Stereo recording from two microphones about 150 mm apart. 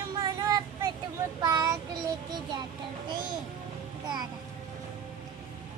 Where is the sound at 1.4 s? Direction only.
20° right (ahead or behind).